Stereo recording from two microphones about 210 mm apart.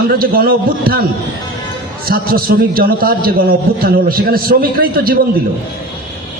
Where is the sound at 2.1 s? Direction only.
45° right (ahead or behind).